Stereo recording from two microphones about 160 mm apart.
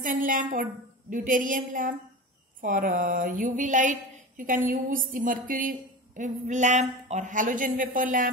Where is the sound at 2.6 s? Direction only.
55° right (ahead or behind).